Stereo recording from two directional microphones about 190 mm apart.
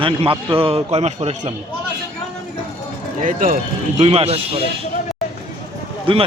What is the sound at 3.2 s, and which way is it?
Speech, 45° right (ahead or behind).